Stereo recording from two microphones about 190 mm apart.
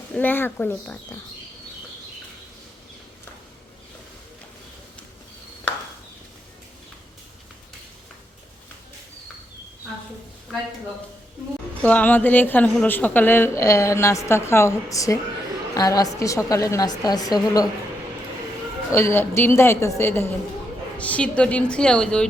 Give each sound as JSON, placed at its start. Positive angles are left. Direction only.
{"t": 0.1, "sound": "a woman's voice", "side_deg": 10}
{"t": 11.8, "sound": "a woman's voice", "side_deg": 10}
{"t": 18.9, "sound": "a woman's voice", "side_deg": 15}